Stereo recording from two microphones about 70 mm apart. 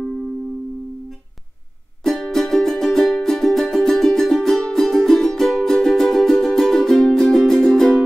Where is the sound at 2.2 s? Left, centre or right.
Centre.